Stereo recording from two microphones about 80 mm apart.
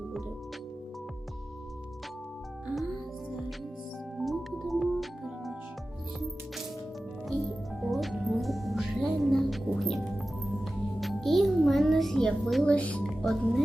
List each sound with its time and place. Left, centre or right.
4.2 s music: centre
7.3 s music: centre
12.6 s music: centre
13.0 s music: centre